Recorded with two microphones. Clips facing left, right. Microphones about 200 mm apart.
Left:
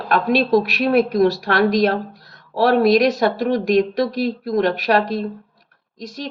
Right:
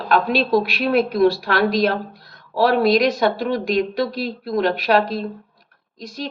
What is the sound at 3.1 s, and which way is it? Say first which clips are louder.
A woman's voice: left 1 dB; 45° left (ahead or behind).